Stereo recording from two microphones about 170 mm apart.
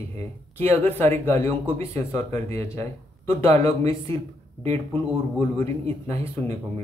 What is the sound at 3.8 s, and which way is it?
Speech, 15° left (ahead or behind).